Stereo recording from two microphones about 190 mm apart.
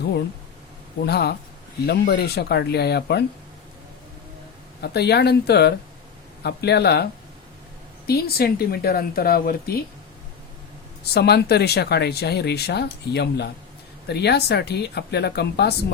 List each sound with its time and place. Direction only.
1.0 s speech: 60° left (ahead or behind)
4.8 s speech: 60° left (ahead or behind)
11.0 s speech: 60° left (ahead or behind)